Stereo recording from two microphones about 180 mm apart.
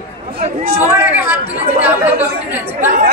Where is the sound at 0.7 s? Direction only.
15° right (ahead or behind).